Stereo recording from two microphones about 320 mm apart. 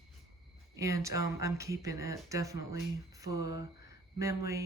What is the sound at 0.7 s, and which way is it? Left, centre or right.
Speech, centre.